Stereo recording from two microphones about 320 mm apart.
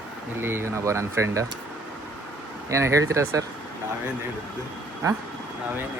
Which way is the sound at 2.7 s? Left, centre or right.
Centre.